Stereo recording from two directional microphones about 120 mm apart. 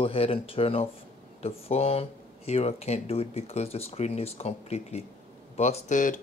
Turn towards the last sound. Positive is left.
turn(degrees=90)